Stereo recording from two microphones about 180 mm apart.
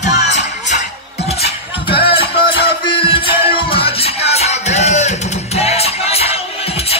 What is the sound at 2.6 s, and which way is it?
Music, 30° left (ahead or behind).